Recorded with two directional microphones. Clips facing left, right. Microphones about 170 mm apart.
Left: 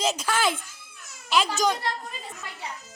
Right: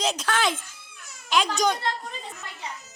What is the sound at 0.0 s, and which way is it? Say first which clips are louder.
A woman's voice: even; 5° left (ahead or behind).